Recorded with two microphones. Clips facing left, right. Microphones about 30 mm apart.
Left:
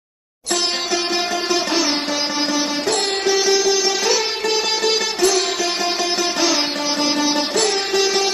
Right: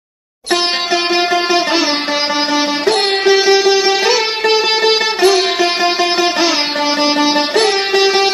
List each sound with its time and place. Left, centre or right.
1.1 s music: right
2.5 s sitar: right
7.0 s music: right